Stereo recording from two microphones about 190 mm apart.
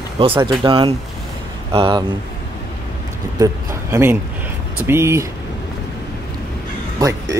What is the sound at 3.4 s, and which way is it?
A man's voice, 15° right (ahead or behind).